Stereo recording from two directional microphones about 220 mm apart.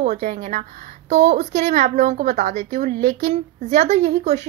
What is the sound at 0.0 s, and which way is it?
A woman's voice, 35° right (ahead or behind).